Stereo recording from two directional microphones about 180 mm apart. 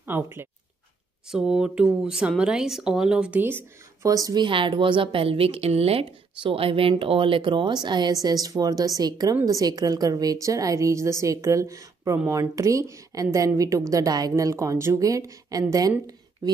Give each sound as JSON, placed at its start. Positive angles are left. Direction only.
{"t": 0.0, "sound": "a woman's voice", "side_deg": -10}